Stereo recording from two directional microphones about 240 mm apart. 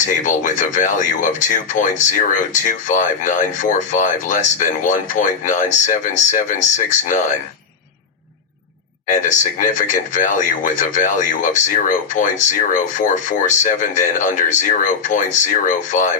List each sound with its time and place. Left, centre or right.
0.0 s speech: left
9.0 s speech: left